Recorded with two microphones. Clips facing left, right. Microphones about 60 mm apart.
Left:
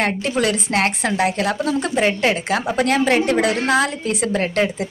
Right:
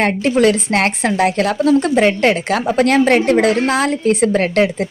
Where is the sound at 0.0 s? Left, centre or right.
Right.